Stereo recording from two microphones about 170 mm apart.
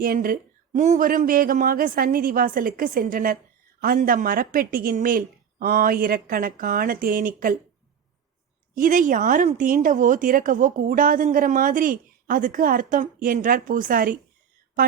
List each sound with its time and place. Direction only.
0.0 s a woman's voice: 55° right (ahead or behind)
8.7 s a woman's voice: 50° right (ahead or behind)